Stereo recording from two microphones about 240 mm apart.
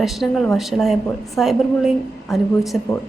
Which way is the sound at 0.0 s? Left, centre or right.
Centre.